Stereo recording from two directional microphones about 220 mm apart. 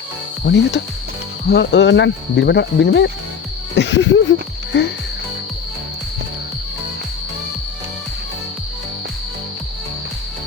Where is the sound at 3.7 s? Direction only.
55° left (ahead or behind).